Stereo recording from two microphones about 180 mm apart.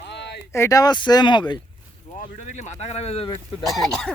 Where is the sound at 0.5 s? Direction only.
15° left (ahead or behind).